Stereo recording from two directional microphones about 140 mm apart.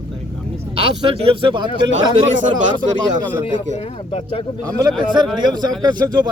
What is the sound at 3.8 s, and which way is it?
Speech, 45° left (ahead or behind).